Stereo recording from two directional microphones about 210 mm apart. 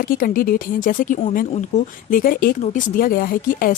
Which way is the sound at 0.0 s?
40° left (ahead or behind).